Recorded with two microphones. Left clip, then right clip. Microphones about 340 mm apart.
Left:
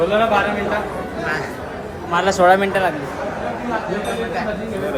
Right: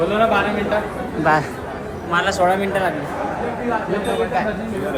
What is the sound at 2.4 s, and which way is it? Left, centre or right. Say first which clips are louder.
Speech: left 8 dB; left.